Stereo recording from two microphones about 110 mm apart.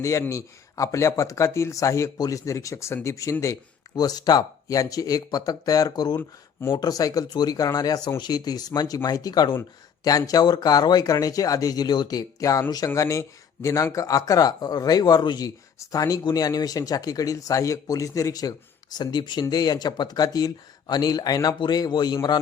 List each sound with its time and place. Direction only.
0.0 s speech: 30° left (ahead or behind)
6.1 s speech: 20° left (ahead or behind)
6.7 s speech: 35° left (ahead or behind)